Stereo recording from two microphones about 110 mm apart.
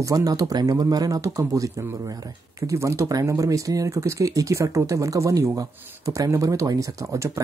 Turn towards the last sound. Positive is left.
turn(degrees=-30)  # may be behind; listen again after turning